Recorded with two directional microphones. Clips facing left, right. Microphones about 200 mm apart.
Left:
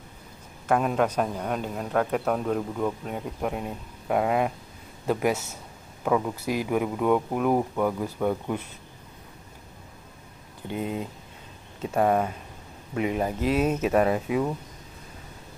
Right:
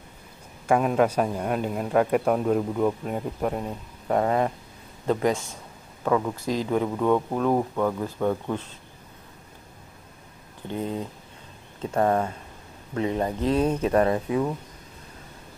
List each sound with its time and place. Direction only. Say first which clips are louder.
0.7 s a man's voice: right 2 dB; 5° right (ahead or behind)
10.7 s speech: right 1 dB; 10° left (ahead or behind)